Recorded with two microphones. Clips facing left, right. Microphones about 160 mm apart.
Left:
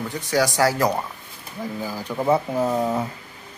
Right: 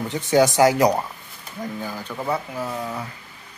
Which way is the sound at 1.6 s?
10° left (ahead or behind).